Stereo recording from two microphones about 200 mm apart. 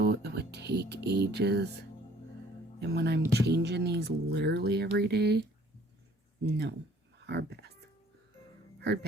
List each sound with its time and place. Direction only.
0.0 s speech: 55° right (ahead or behind)
2.8 s speech: 55° right (ahead or behind)
6.4 s speech: 55° right (ahead or behind)
7.3 s a sound: 55° right (ahead or behind)